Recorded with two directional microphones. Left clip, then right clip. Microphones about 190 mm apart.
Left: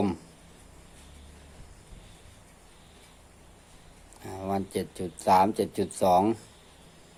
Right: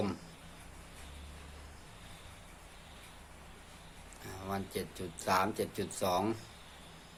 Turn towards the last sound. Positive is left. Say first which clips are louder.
# left 10 dB
turn(degrees=45)  # may be behind; listen again after turning